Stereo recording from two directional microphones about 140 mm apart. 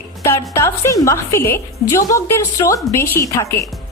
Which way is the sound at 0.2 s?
20° left (ahead or behind).